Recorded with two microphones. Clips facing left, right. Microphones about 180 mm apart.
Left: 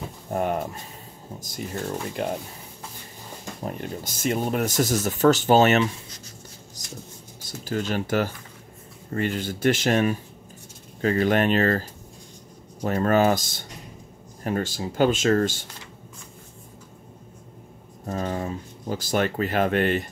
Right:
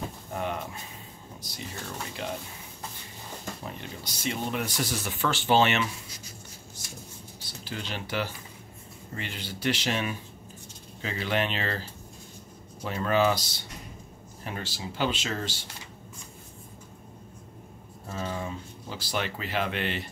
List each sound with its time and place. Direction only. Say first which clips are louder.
0.3 s speech: left 8 dB; 45° left (ahead or behind)
3.6 s speech: left 7 dB; 45° left (ahead or behind)
6.8 s a sound: left 7 dB; 40° left (ahead or behind)
7.4 s speech: left 10 dB; 45° left (ahead or behind)
18.0 s speech: left 6 dB; 45° left (ahead or behind)